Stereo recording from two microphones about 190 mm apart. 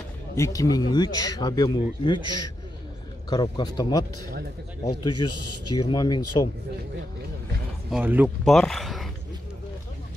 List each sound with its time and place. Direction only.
0.4 s speech: 20° left (ahead or behind)
7.9 s speech: 10° right (ahead or behind)